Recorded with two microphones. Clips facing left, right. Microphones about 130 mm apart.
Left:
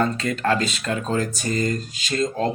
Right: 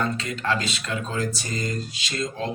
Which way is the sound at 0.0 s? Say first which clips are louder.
Left 5 dB; 50° left (ahead or behind).